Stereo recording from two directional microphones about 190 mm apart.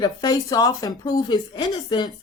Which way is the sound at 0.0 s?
20° left (ahead or behind).